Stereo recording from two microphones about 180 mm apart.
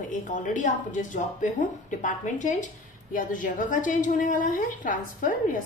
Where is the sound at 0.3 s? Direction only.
45° left (ahead or behind).